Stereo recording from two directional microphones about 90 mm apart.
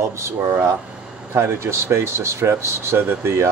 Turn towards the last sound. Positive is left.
turn(degrees=-30)  # may be behind; listen again after turning